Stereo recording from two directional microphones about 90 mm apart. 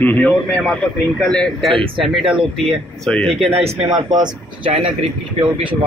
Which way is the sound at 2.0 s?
5° right (ahead or behind).